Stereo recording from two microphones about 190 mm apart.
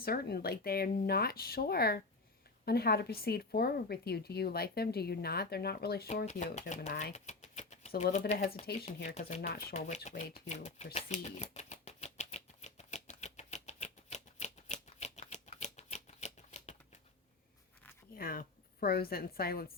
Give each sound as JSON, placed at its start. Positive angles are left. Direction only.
{"t": 0.0, "sound": "speech", "side_deg": 55}
{"t": 6.1, "sound": "speech", "side_deg": 40}
{"t": 9.0, "sound": "speech", "side_deg": 40}
{"t": 10.9, "sound": "typewriter", "side_deg": 35}
{"t": 18.2, "sound": "a woman's voice", "side_deg": 50}